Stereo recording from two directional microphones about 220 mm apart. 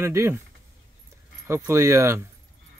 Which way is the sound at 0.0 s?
15° right (ahead or behind).